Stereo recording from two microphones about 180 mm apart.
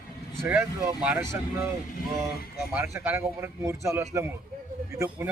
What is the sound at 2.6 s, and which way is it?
Speech, 15° right (ahead or behind).